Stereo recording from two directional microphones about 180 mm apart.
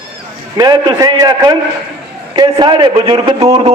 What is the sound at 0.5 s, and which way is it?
A man's voice, 20° right (ahead or behind).